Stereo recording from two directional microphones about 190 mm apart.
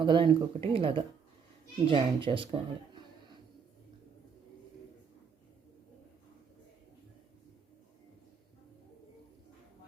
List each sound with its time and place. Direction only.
0.0 s speech: 25° right (ahead or behind)